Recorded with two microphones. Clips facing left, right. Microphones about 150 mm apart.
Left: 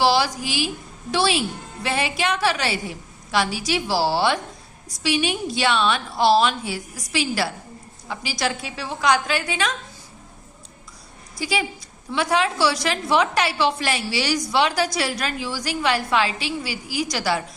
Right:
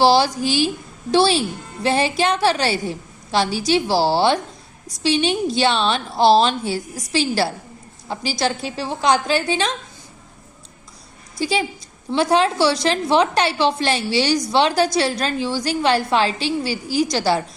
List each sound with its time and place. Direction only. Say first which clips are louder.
0.0 s a woman's voice: right 4 dB; 30° right (ahead or behind)
11.3 s a woman's voice: right 4 dB; 25° right (ahead or behind)